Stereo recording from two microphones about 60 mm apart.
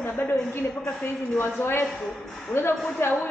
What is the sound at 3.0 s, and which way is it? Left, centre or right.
Speech, left.